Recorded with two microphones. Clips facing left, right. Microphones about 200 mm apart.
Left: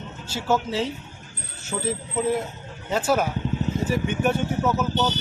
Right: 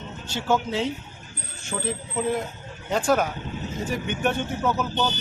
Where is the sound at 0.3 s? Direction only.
5° left (ahead or behind).